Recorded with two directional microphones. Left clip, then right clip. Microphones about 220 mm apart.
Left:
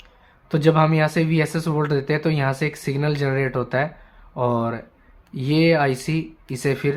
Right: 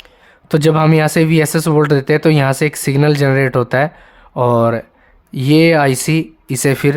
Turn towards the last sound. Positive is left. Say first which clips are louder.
# right 8 dB
turn(degrees=-45)  # may be behind; listen again after turning